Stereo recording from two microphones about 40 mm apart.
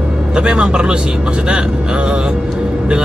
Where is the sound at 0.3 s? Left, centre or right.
Right.